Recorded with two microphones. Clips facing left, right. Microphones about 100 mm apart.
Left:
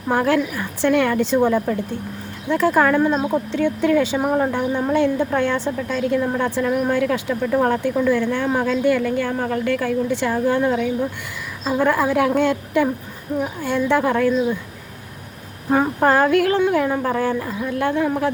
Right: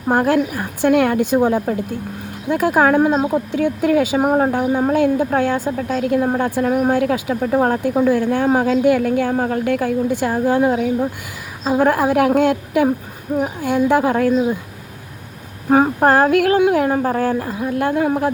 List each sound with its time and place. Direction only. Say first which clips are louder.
0.1 s a woman's voice: right 2 dB; 45° right (ahead or behind)
2.7 s speech: right 4 dB; 55° right (ahead or behind)
3.2 s speech: right 2 dB; 10° right (ahead or behind)
3.6 s a woman's voice: right 1 dB; 45° right (ahead or behind)
7.4 s a woman's voice: right 2 dB; 40° right (ahead or behind)
16.0 s a woman's voice: even; 45° right (ahead or behind)
17.0 s a woman's voice: right 2 dB; 40° right (ahead or behind)